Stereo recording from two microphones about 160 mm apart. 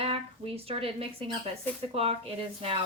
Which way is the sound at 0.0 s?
35° right (ahead or behind).